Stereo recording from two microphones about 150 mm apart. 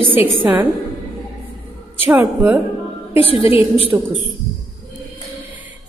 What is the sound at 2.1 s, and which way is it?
Speech, 10° right (ahead or behind).